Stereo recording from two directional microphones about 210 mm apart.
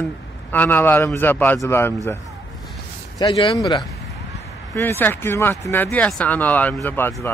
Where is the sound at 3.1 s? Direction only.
25° left (ahead or behind).